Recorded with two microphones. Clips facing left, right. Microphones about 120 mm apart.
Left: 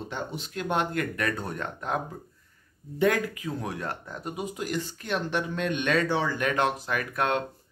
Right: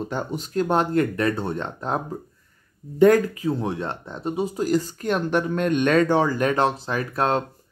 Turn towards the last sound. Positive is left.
turn(degrees=-30)  # may be behind; listen again after turning